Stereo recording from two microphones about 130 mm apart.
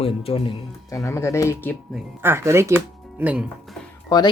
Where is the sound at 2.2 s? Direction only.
20° right (ahead or behind).